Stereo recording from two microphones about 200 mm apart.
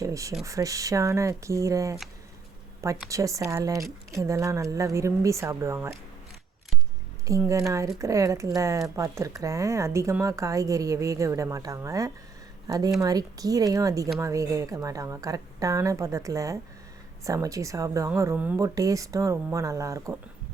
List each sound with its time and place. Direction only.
0.0 s speech: 15° right (ahead or behind)
3.1 s speech: 15° right (ahead or behind)
7.3 s speech: 15° right (ahead or behind)